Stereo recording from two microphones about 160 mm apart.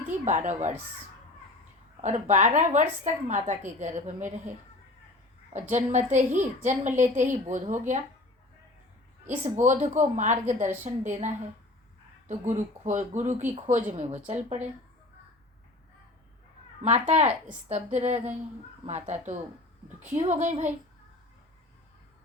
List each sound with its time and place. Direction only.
0.3 s speech: 50° right (ahead or behind)
2.0 s speech: 45° right (ahead or behind)
5.7 s speech: 45° right (ahead or behind)
9.4 s speech: 50° right (ahead or behind)
16.8 s speech: 45° right (ahead or behind)